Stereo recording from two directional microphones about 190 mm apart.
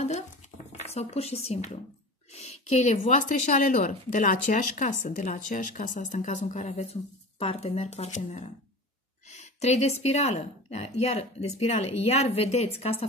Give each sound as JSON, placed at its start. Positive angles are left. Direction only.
{"t": 0.7, "sound": "a woman's voice", "side_deg": 35}